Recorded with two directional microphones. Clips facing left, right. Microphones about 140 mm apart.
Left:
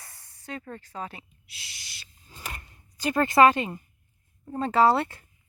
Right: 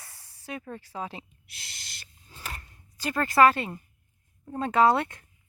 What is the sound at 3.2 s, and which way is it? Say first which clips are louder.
Speech: left 2 dB; 20° left (ahead or behind).